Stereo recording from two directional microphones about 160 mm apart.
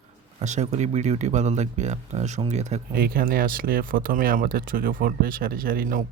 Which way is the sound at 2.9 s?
70° right (ahead or behind).